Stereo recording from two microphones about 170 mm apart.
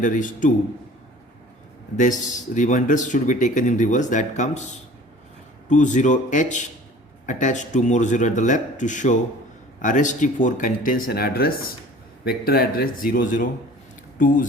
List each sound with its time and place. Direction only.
0.0 s a man's voice: 50° left (ahead or behind)
2.0 s a man's voice: 50° left (ahead or behind)